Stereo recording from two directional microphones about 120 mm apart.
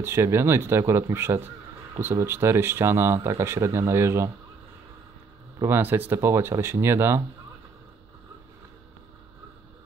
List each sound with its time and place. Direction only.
0.0 s speech: 20° right (ahead or behind)
5.7 s speech: 15° right (ahead or behind)